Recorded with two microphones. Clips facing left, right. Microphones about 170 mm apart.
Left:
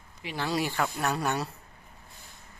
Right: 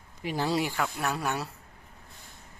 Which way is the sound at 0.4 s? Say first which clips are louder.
Right 1 dB; 25° right (ahead or behind).